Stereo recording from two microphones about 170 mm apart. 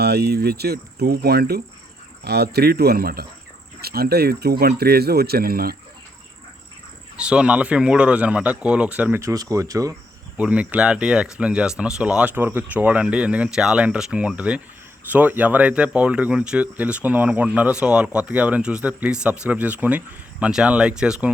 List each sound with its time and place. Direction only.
0.0 s speech: 70° right (ahead or behind)
7.2 s speech: 5° right (ahead or behind)
10.3 s speech: 5° right (ahead or behind)